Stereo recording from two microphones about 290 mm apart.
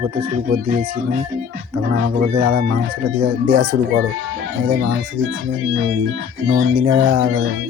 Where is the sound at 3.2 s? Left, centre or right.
Right.